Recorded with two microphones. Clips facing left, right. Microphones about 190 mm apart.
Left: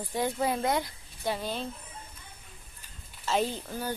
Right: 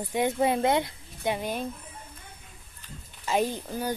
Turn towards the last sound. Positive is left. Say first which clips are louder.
# right 3 dB
turn(degrees=-15)  # may be behind; listen again after turning